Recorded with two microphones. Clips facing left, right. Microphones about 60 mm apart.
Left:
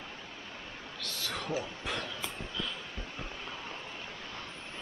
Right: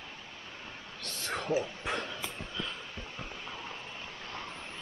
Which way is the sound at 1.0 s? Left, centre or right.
Right.